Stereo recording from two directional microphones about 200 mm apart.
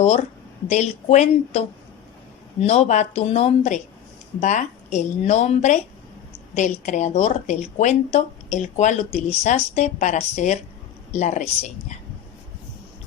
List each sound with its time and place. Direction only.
0.7 s a woman's voice: 35° left (ahead or behind)